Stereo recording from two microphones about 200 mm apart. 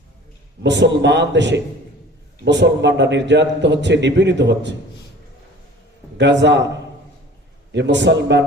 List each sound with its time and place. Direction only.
0.6 s a man's voice: 60° right (ahead or behind)
6.1 s a man's voice: 60° right (ahead or behind)
7.7 s a man's voice: 60° right (ahead or behind)